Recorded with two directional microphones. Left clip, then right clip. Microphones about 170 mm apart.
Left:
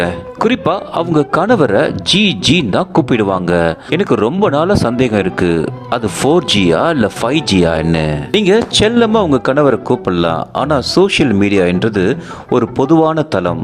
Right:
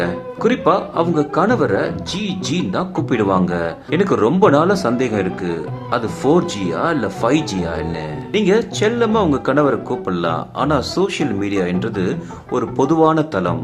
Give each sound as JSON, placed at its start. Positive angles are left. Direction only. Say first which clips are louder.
{"t": 0.0, "sound": "speech", "louder": "left 4 dB", "side_deg": 50}